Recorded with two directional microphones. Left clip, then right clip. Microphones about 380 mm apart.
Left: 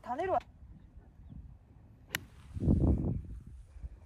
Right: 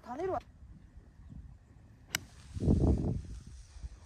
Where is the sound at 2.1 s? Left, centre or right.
Centre.